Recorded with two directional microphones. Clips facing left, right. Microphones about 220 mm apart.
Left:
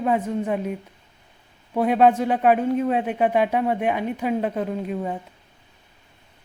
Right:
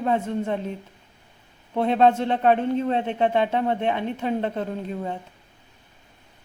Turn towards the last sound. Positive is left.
turn(degrees=10)  # may be behind; listen again after turning